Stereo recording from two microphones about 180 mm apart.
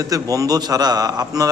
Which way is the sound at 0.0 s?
20° right (ahead or behind).